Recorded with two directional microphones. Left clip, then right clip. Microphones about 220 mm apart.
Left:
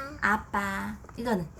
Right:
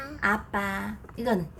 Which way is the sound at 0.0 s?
10° left (ahead or behind).